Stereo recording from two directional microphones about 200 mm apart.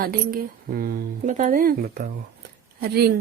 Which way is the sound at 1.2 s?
35° right (ahead or behind).